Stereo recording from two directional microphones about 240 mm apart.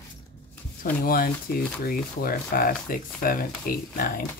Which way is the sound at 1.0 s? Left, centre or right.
Left.